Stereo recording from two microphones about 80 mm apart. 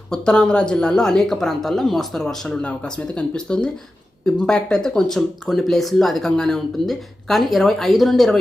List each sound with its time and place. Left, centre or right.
0.1 s speech: centre